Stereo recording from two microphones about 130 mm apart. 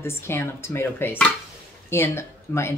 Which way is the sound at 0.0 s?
20° left (ahead or behind).